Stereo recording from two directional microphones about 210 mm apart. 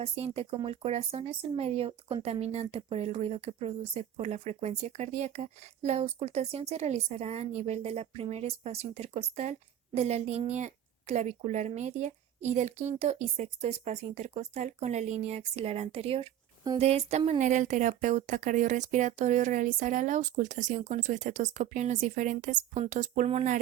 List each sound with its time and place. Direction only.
0.0 s speech: 30° right (ahead or behind)